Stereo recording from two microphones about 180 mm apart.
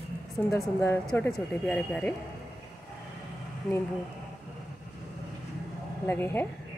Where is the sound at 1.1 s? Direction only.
5° left (ahead or behind).